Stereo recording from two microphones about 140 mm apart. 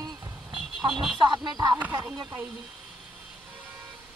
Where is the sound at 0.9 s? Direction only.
5° right (ahead or behind).